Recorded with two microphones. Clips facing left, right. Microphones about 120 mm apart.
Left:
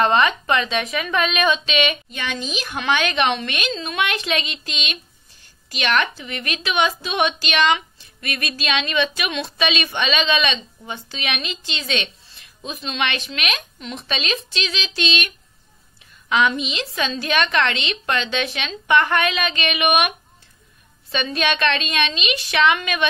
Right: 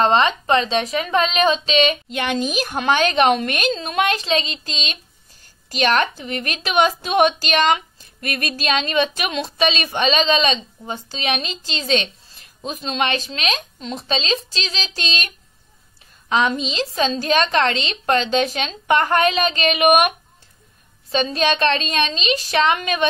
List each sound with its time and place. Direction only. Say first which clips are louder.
0.0 s a woman's voice: right 1 dB; 30° right (ahead or behind)
2.0 s a woman's voice: right 6 dB; 60° right (ahead or behind); by 23.0 s 35° right (ahead or behind)